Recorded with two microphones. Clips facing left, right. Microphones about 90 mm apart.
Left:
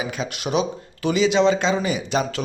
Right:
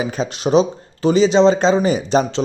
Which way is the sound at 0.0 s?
35° right (ahead or behind).